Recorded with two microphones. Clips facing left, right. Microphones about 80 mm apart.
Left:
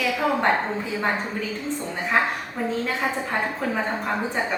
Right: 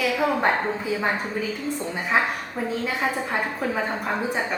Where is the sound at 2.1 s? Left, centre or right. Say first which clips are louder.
Even; centre.